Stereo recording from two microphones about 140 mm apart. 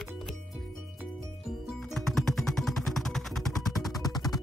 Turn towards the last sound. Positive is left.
turn(degrees=25)  # may be behind; listen again after turning